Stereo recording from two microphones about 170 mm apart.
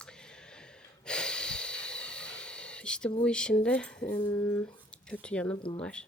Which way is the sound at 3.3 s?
5° left (ahead or behind).